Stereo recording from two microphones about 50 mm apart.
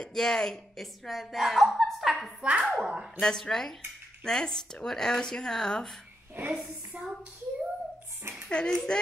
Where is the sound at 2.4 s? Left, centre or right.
Right.